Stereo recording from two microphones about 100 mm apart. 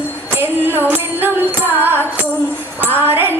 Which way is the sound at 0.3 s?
20° right (ahead or behind).